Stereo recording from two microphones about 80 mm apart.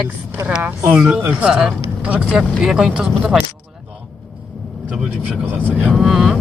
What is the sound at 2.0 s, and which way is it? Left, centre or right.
Speech, centre.